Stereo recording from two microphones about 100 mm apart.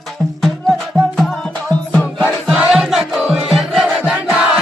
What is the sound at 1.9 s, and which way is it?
Music, 15° left (ahead or behind).